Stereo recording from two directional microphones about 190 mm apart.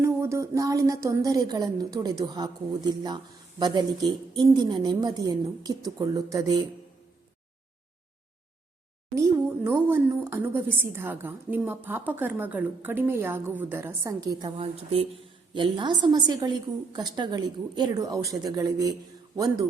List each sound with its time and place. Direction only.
0.0 s a woman's voice: 15° right (ahead or behind)
9.6 s a woman's voice: 10° right (ahead or behind)